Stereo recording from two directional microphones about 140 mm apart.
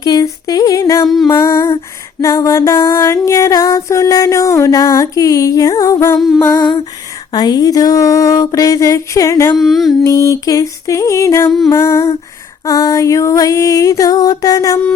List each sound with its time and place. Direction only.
0.0 s music: 30° left (ahead or behind)
1.0 s music: centre (ahead or behind)
1.4 s music: 25° left (ahead or behind)
6.1 s music: centre (ahead or behind)
6.5 s music: 25° left (ahead or behind)
9.6 s music: centre (ahead or behind)
10.0 s music: 25° left (ahead or behind)